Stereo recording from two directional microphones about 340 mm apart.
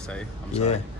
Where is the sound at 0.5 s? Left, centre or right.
Centre.